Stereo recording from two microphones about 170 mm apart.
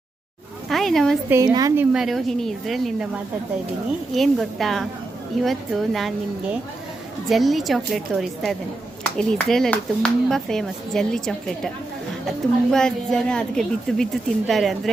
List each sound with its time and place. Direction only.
0.7 s speech: centre (ahead or behind)
1.3 s a woman's voice: 20° right (ahead or behind); by 3.1 s centre (ahead or behind)
4.1 s a woman's voice: centre (ahead or behind)
12.7 s a woman's voice: 5° left (ahead or behind)